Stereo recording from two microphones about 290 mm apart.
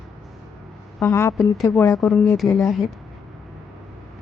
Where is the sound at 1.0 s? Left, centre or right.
Centre.